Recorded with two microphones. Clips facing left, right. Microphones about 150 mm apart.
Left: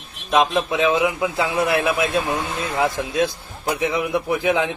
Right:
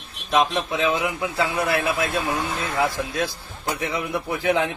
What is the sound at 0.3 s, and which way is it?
A man's voice, 25° left (ahead or behind).